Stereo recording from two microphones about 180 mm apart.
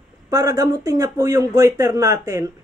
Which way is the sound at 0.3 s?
20° right (ahead or behind).